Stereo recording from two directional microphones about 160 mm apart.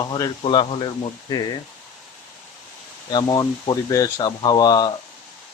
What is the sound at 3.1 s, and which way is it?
Speech, 25° left (ahead or behind).